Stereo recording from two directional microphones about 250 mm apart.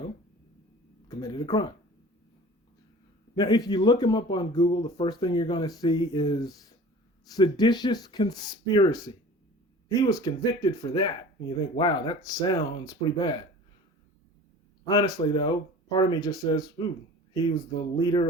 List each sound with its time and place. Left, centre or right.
1.0 s speech: centre
3.3 s speech: centre
14.8 s speech: centre
18.0 s speech: centre